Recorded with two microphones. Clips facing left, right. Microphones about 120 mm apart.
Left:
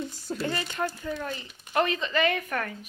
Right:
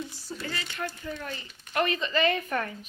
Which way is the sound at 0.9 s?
10° left (ahead or behind).